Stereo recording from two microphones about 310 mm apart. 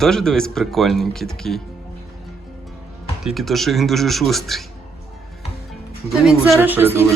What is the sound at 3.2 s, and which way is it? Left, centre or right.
Speech, centre.